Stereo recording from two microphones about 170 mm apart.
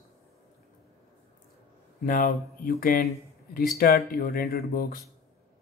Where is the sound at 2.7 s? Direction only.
55° left (ahead or behind).